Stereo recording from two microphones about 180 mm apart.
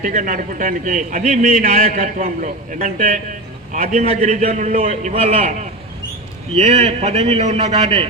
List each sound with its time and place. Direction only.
0.0 s a man's voice: 45° right (ahead or behind)